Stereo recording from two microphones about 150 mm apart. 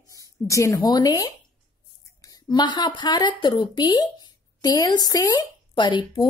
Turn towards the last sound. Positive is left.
turn(degrees=30)  # may be behind; listen again after turning